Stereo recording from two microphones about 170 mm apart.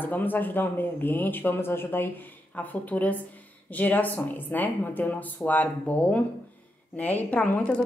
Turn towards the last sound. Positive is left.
turn(degrees=10)  # may be behind; listen again after turning